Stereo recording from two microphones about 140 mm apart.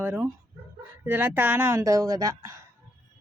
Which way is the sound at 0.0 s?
15° right (ahead or behind).